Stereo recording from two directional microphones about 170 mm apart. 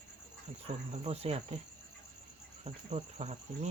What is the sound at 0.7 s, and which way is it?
Cricket, 40° right (ahead or behind).